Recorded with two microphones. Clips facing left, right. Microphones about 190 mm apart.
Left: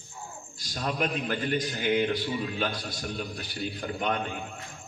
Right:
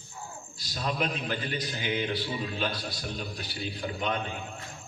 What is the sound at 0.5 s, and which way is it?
A man's voice, 50° left (ahead or behind).